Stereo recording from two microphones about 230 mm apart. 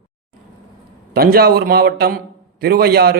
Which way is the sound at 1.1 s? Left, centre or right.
Right.